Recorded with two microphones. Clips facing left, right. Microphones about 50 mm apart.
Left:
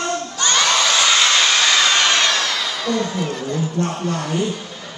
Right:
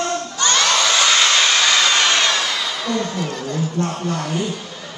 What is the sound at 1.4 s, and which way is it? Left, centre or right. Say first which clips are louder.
Hair dryer: even; centre.